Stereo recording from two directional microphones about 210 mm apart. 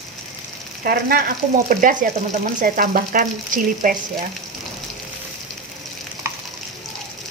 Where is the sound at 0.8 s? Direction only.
45° right (ahead or behind).